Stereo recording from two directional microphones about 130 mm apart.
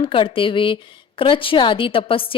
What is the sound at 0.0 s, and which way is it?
Speech, 45° left (ahead or behind).